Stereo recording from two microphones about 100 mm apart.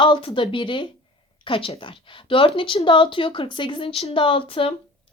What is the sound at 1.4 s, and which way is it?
A woman's voice, 65° left (ahead or behind).